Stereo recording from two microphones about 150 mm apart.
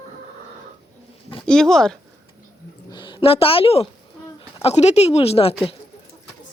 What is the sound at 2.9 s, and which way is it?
A woman's voice, 35° left (ahead or behind).